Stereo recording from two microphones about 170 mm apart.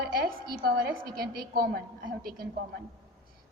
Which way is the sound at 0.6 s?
65° right (ahead or behind).